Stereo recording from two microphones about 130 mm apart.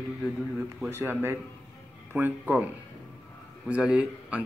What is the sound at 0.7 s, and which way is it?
A man's voice, 15° right (ahead or behind).